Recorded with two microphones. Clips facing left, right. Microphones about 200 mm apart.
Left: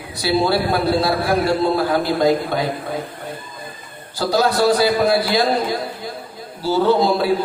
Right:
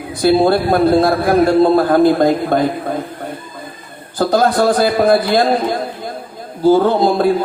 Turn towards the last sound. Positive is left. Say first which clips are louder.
# right 3 dB
turn(degrees=-50)  # may be behind; listen again after turning